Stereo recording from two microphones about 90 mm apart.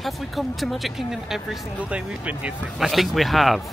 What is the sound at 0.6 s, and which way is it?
A man's voice, centre (ahead or behind).